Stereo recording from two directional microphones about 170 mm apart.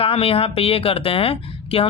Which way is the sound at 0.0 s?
35° left (ahead or behind).